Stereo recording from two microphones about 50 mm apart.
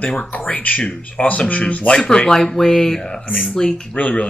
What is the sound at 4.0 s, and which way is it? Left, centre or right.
Speech, left.